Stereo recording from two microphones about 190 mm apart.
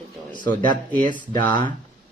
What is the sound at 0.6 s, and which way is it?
Speech, 45° right (ahead or behind).